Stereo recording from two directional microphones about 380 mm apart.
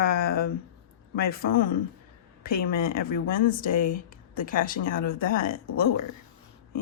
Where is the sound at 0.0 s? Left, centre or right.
Left.